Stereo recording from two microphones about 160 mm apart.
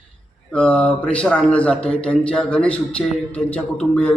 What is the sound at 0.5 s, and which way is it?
Speech, 5° left (ahead or behind).